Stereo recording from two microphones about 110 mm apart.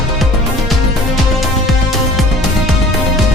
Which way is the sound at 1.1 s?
Centre (ahead or behind).